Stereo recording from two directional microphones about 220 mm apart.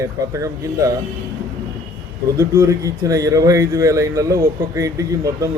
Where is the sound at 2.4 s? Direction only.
15° right (ahead or behind).